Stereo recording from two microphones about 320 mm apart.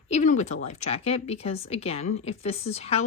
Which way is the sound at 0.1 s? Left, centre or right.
Left.